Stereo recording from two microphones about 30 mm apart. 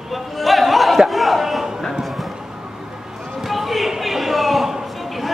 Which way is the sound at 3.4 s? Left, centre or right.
Centre.